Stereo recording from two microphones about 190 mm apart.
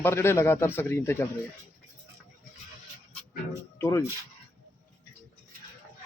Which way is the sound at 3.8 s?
15° left (ahead or behind).